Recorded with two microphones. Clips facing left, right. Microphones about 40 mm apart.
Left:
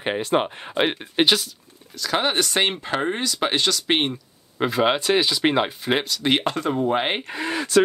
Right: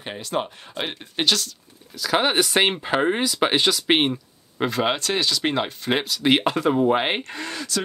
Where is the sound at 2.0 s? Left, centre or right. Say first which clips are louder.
Right 2 dB; centre.